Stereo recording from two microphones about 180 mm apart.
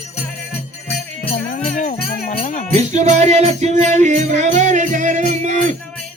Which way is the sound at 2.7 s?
40° right (ahead or behind).